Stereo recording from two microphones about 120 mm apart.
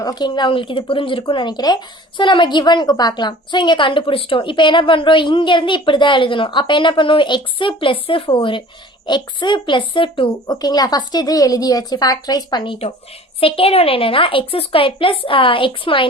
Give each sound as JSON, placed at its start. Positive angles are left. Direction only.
{"t": 0.0, "sound": "speech", "side_deg": 35}
{"t": 10.4, "sound": "speech", "side_deg": 35}